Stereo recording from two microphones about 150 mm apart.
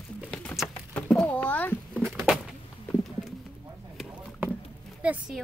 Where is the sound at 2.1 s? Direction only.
5° right (ahead or behind).